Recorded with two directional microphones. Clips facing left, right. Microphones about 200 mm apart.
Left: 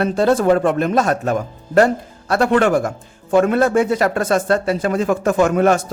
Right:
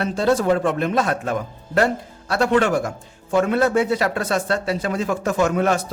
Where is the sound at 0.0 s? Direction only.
55° left (ahead or behind).